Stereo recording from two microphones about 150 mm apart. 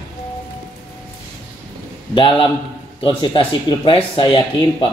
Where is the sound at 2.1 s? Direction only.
35° left (ahead or behind).